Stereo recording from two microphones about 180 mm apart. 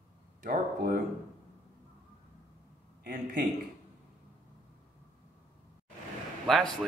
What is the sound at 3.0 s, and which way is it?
Speech, 50° right (ahead or behind).